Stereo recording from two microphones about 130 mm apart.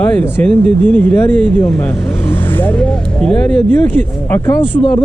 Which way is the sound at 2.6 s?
10° left (ahead or behind).